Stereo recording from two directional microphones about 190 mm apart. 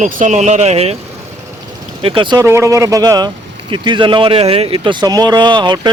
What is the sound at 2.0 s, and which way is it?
Speech, 25° right (ahead or behind).